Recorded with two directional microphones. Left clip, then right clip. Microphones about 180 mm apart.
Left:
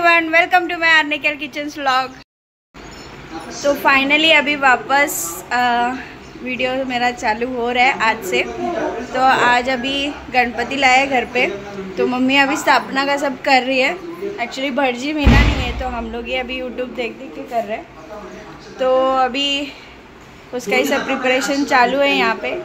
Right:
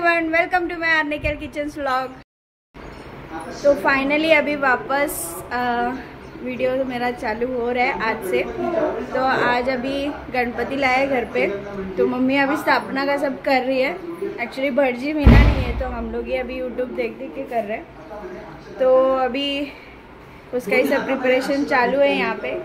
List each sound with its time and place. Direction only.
0.0 s a woman's voice: centre (ahead or behind)
3.6 s a woman's voice: centre (ahead or behind)
18.8 s a sound: 5° right (ahead or behind)
21.2 s a woman's voice: 10° left (ahead or behind)